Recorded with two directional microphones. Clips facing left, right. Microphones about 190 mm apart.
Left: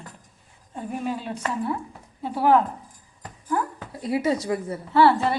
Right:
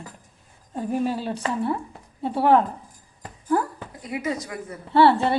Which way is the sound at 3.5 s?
35° right (ahead or behind).